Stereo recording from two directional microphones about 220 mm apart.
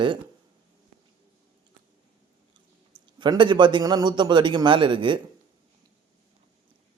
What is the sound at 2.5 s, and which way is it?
A man's voice, 20° right (ahead or behind).